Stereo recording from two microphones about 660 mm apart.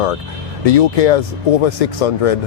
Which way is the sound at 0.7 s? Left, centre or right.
Left.